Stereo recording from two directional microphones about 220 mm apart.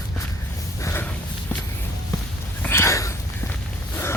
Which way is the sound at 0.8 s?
10° left (ahead or behind).